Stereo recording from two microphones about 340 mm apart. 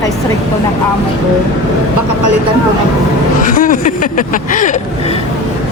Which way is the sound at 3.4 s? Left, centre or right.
Left.